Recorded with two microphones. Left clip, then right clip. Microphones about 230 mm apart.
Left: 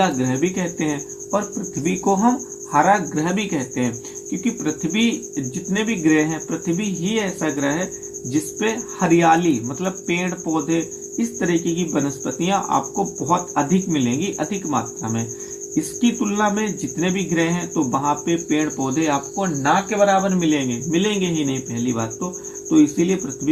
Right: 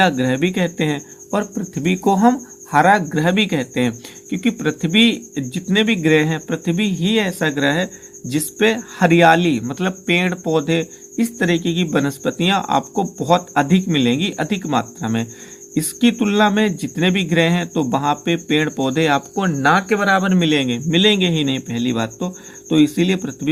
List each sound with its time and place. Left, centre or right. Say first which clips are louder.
0.0 s speech: right 3 dB; right